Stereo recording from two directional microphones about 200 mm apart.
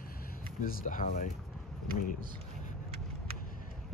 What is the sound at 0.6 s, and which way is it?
Speech, 40° left (ahead or behind).